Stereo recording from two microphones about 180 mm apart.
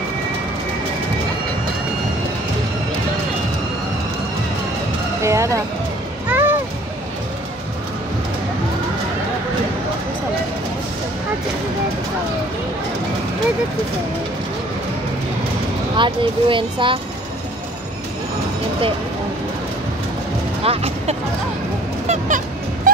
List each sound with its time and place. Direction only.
5.2 s music: 15° right (ahead or behind)
16.0 s speech: 30° right (ahead or behind)
20.6 s speech: 35° right (ahead or behind)
22.0 s a sound: 40° right (ahead or behind)